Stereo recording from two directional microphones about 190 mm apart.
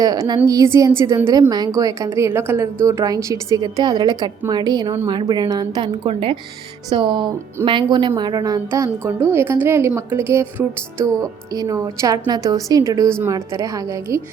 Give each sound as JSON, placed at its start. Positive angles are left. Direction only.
{"t": 0.0, "sound": "a woman's voice", "side_deg": -20}